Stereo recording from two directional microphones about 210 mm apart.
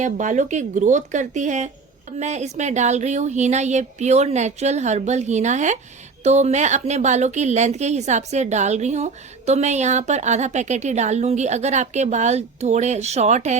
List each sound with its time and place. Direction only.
0.0 s a woman's voice: 35° right (ahead or behind)